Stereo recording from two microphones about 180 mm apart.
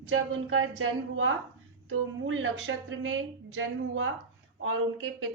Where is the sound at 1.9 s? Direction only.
90° right.